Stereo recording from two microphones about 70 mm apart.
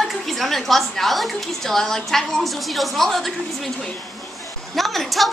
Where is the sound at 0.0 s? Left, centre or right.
Centre.